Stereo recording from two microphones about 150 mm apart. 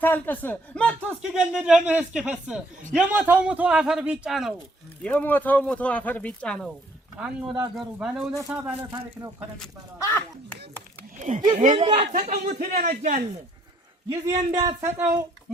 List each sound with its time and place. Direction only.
0.0 s speech: 10° left (ahead or behind)
1.2 s speech: 5° right (ahead or behind)
5.0 s speech: 10° left (ahead or behind)
7.2 s speech: 5° right (ahead or behind)
8.9 s speech: 30° right (ahead or behind)
10.0 s speech: 15° left (ahead or behind)
11.2 s a man's voice: 55° right (ahead or behind)
11.9 s a man's voice: 45° right (ahead or behind)
12.5 s speech: 65° right (ahead or behind)
14.1 s a man's voice: 25° right (ahead or behind)
14.8 s speech: 15° right (ahead or behind)